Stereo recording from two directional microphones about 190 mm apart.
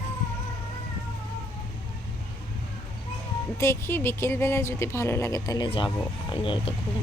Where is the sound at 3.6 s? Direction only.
15° left (ahead or behind).